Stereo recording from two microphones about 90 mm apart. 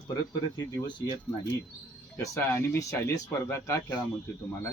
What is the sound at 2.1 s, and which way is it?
Speech, 30° left (ahead or behind).